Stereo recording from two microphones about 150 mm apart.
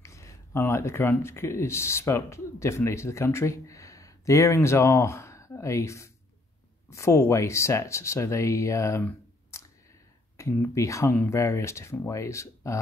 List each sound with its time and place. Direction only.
0.0 s speech: 20° left (ahead or behind)